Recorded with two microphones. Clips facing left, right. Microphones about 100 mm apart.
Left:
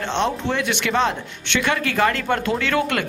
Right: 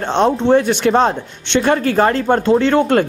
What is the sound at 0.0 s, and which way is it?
Speech, 40° right (ahead or behind).